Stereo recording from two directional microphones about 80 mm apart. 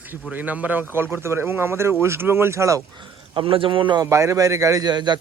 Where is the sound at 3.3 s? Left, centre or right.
Right.